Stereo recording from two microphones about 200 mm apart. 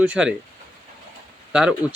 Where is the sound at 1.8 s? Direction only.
20° left (ahead or behind).